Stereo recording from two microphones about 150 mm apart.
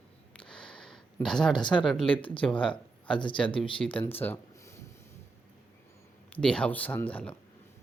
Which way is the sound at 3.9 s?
15° left (ahead or behind).